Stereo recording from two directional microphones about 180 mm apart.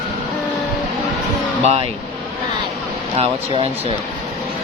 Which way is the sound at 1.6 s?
35° right (ahead or behind).